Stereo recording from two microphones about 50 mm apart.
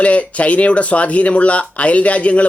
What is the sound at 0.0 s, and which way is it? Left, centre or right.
Speech, left.